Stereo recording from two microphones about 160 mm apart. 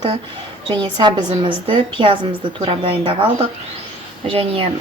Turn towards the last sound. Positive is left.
turn(degrees=-35)  # may be behind; listen again after turning